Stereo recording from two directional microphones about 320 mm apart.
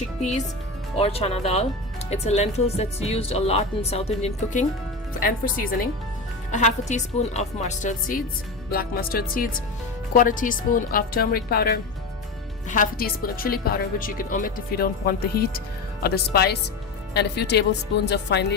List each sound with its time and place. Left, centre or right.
0.9 s speech: centre
6.5 s speech: left